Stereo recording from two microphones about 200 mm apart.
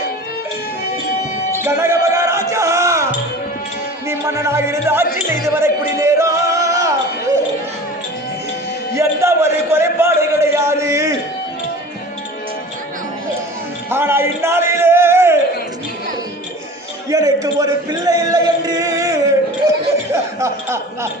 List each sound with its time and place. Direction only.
1.5 s music: 10° right (ahead or behind)
2.0 s a sound: 15° right (ahead or behind)
4.1 s speech: 15° right (ahead or behind)
9.0 s speech: 15° right (ahead or behind)
13.9 s a man's voice: 10° right (ahead or behind)
17.1 s speech: 15° right (ahead or behind)